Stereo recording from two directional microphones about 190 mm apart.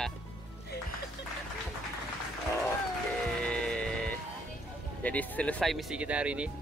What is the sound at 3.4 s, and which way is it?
Music, 5° left (ahead or behind).